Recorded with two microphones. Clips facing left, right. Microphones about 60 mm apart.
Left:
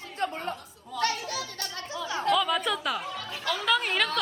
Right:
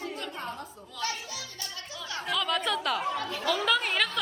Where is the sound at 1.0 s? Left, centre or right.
Left.